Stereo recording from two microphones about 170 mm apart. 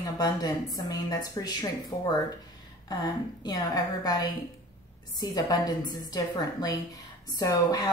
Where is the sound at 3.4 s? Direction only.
25° left (ahead or behind).